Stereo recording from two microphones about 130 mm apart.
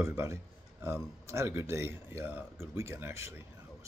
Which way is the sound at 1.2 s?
20° right (ahead or behind).